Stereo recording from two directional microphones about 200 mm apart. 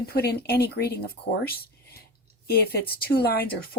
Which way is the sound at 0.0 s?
50° left (ahead or behind).